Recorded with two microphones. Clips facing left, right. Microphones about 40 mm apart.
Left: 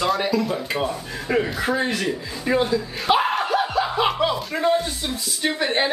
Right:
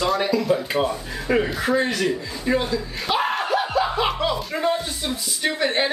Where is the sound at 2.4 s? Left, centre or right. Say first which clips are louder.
Left 2 dB; centre.